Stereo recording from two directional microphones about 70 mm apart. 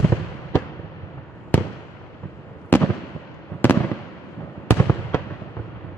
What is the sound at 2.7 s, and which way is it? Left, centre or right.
Fireworks, left.